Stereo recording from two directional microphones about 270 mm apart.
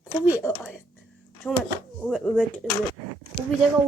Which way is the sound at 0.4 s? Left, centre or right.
Centre.